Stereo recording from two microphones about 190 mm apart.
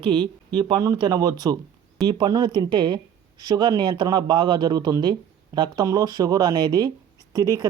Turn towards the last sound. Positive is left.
turn(degrees=-20)  # may be behind; listen again after turning